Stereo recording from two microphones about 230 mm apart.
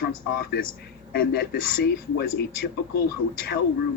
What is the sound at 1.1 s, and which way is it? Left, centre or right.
A man's voice, left.